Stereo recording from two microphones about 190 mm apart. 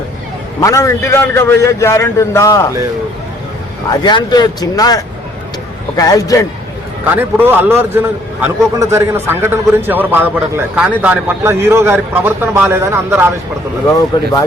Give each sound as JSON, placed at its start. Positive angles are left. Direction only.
{"t": 0.6, "sound": "a man's voice", "side_deg": 15}
{"t": 4.0, "sound": "speech", "side_deg": 20}
{"t": 7.0, "sound": "a man's voice", "side_deg": -10}